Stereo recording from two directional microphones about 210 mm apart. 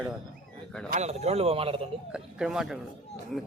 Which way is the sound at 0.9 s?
30° right (ahead or behind).